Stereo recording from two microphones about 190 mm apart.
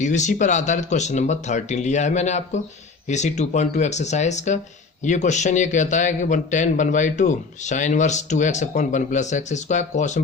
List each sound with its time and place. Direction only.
0.0 s a man's voice: 40° left (ahead or behind)